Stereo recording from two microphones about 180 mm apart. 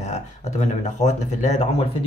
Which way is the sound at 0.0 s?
40° left (ahead or behind).